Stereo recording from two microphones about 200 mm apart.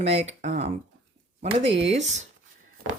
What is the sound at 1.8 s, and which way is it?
Speech, 65° right (ahead or behind).